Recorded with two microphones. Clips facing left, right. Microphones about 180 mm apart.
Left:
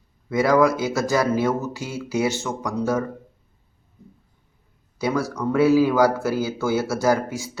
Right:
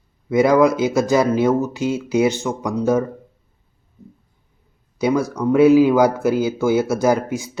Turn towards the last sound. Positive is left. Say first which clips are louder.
# right 3 dB
turn(degrees=-20)  # may be behind; listen again after turning